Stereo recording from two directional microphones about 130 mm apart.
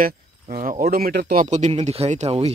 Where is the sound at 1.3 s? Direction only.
65° right (ahead or behind).